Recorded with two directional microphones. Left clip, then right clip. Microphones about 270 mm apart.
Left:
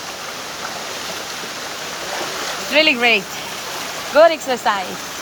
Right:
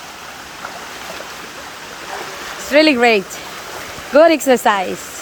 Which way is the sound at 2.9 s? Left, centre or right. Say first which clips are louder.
Right 2 dB; right.